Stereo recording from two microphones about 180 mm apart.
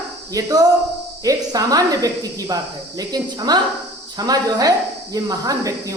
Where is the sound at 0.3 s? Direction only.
20° right (ahead or behind).